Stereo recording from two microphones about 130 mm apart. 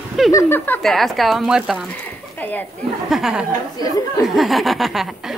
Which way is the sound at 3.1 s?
5° right (ahead or behind).